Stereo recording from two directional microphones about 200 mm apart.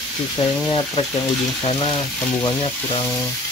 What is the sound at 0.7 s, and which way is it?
Speech, 25° left (ahead or behind).